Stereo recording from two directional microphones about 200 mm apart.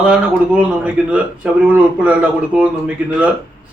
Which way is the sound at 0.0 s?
5° right (ahead or behind).